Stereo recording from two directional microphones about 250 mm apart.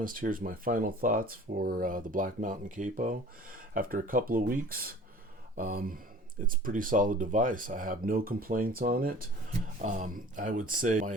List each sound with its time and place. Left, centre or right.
0.0 s speech: right